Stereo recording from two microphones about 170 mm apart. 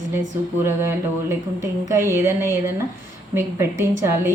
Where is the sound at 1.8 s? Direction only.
15° right (ahead or behind).